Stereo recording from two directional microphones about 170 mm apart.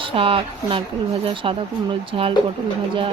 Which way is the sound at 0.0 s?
30° right (ahead or behind).